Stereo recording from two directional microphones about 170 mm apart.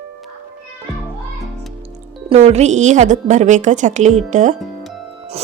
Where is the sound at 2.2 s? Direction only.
35° right (ahead or behind).